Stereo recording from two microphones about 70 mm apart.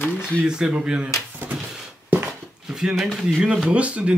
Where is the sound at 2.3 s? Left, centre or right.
Centre.